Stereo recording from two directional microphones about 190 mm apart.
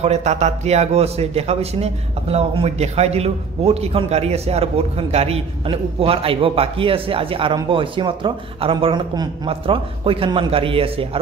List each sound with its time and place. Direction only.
0.0 s a man's voice: 35° right (ahead or behind)